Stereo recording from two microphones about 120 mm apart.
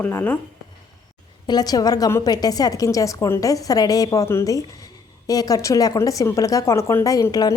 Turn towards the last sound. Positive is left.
turn(degrees=30)  # may be behind; listen again after turning